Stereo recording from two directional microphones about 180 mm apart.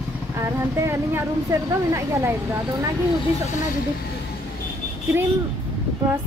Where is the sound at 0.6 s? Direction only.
15° right (ahead or behind).